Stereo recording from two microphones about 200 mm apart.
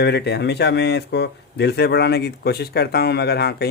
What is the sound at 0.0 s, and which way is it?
A man's voice, 55° left (ahead or behind).